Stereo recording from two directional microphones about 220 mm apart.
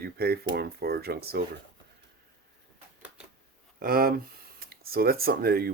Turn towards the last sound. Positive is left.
turn(degrees=-45)  # may be behind; listen again after turning